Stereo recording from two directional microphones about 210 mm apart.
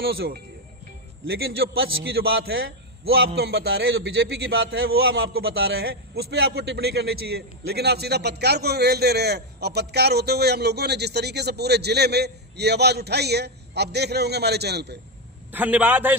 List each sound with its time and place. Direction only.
0.0 s a man's voice: 45° right (ahead or behind)
15.5 s a man's voice: 10° right (ahead or behind)